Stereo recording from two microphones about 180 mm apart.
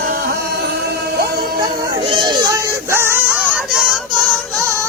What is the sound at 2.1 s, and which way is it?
Music, 25° right (ahead or behind).